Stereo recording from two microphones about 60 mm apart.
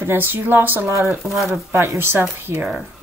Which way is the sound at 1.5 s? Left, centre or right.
Right.